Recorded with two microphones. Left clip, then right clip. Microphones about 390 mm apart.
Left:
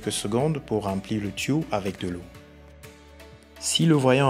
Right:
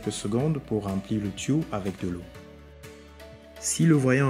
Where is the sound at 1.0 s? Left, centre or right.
Centre.